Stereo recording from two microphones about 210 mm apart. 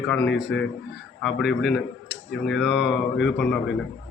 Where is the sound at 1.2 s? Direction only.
Centre (ahead or behind).